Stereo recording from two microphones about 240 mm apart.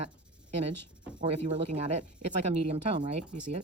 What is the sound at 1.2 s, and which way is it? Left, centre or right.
Speech, right.